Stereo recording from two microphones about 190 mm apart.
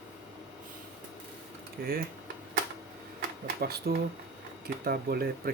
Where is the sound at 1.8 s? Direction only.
50° right (ahead or behind).